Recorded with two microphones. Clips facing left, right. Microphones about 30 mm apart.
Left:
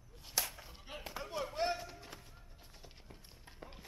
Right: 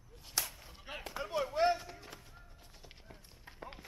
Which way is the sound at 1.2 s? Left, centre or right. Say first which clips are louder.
Right 6 dB; centre.